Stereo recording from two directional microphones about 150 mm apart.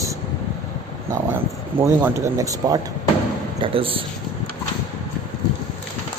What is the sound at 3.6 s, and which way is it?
Speech, 35° right (ahead or behind).